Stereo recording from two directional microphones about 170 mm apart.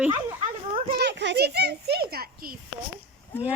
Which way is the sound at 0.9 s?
75° right (ahead or behind).